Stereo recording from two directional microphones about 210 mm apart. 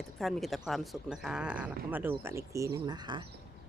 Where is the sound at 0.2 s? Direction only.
Centre (ahead or behind); by 3.2 s 20° right (ahead or behind).